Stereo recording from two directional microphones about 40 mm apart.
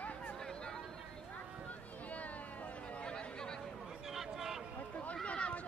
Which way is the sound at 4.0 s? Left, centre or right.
Centre.